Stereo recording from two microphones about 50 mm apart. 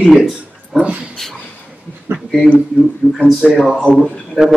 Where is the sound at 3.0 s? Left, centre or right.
Centre.